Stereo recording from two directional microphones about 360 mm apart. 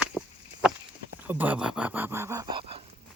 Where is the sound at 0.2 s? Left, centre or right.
Centre.